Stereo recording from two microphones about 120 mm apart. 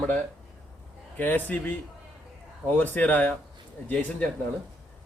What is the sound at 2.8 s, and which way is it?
Speech, 15° left (ahead or behind).